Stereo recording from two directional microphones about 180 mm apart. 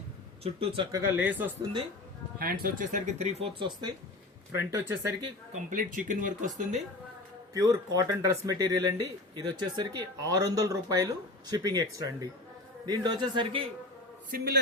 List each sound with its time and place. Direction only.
0.4 s speech: 30° right (ahead or behind)
0.9 s speech: 20° right (ahead or behind)
1.1 s speech: 10° right (ahead or behind)
2.4 s speech: 50° right (ahead or behind); by 3.9 s 25° right (ahead or behind)
4.5 s speech: 15° right (ahead or behind)
5.7 s speech: 45° right (ahead or behind)
7.5 s speech: 20° right (ahead or behind)
14.3 s a man's voice: 60° right (ahead or behind)